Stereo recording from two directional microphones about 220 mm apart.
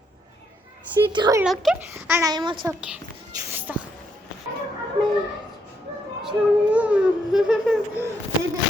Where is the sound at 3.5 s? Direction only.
10° right (ahead or behind).